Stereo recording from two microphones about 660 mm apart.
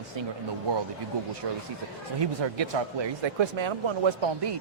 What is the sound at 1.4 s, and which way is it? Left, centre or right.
Speech, right.